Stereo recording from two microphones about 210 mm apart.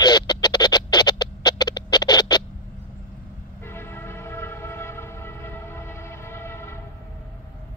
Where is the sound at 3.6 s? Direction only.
10° left (ahead or behind).